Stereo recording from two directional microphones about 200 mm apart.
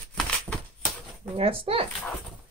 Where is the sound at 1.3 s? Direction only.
30° right (ahead or behind).